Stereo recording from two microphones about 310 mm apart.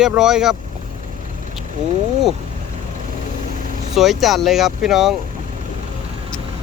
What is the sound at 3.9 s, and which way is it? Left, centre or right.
Speech, centre.